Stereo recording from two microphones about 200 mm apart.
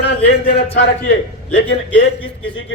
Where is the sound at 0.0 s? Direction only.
60° left (ahead or behind).